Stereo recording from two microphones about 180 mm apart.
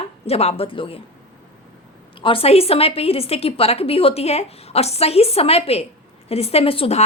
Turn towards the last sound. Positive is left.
turn(degrees=35)  # may be behind; listen again after turning